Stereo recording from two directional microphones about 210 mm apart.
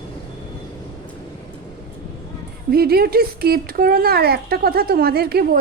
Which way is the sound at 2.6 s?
45° right (ahead or behind).